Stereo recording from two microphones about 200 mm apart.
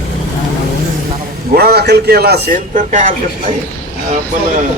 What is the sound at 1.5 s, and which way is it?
A man's voice, 50° right (ahead or behind).